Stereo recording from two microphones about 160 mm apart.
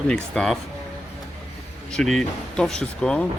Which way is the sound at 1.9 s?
5° left (ahead or behind).